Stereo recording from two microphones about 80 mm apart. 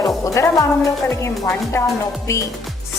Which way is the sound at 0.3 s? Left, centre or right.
Left.